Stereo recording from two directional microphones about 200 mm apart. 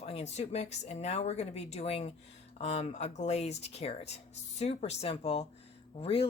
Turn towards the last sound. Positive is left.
turn(degrees=30)  # may be behind; listen again after turning